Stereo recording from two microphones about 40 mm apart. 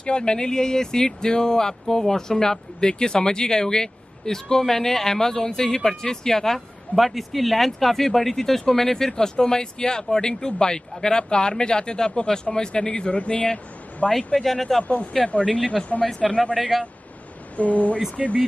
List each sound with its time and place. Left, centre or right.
0.0 s speech: left
7.0 s speech: centre; by 14.0 s left
14.1 s speech: centre
15.2 s speech: left
16.2 s speech: centre
17.6 s speech: left